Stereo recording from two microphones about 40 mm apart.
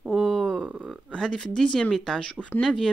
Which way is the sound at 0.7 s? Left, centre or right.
Right.